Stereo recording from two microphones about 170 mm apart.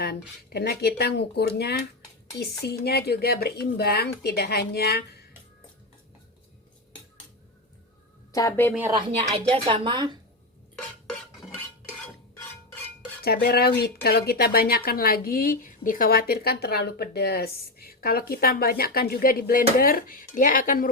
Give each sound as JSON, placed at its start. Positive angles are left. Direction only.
{"t": 0.0, "sound": "speech", "side_deg": 70}
{"t": 8.3, "sound": "a woman's voice", "side_deg": 20}
{"t": 8.9, "sound": "speech", "side_deg": -30}
{"t": 13.2, "sound": "speech", "side_deg": 65}